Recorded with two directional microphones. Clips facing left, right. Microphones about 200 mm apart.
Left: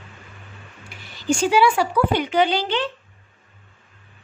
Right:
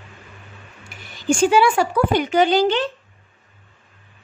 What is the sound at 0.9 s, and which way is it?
Speech, 50° right (ahead or behind).